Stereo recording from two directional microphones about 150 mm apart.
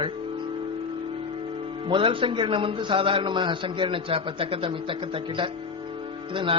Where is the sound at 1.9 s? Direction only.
35° right (ahead or behind).